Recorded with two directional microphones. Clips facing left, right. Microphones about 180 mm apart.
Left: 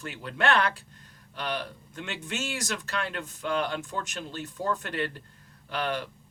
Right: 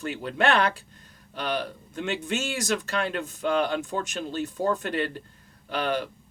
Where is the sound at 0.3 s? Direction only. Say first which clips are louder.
Right 2 dB; 15° right (ahead or behind).